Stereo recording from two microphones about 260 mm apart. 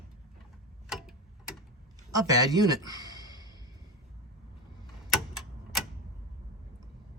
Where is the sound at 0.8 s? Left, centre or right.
Centre.